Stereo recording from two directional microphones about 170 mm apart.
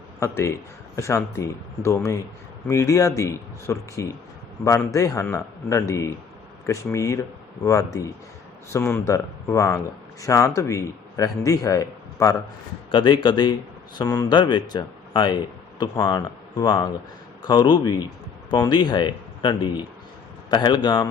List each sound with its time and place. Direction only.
0.2 s speech: 15° left (ahead or behind)